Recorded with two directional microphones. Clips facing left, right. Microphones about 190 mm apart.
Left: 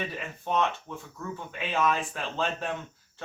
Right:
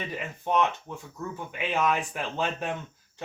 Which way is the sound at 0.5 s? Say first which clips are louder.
Right 2 dB; 15° right (ahead or behind).